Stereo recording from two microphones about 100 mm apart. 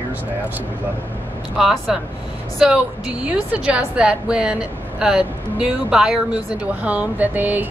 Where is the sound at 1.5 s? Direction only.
5° right (ahead or behind).